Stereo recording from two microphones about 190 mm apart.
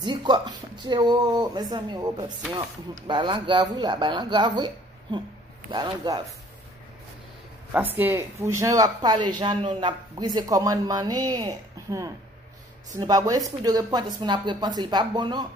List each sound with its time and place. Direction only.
0.0 s speech: 25° right (ahead or behind)
7.7 s speech: 10° right (ahead or behind)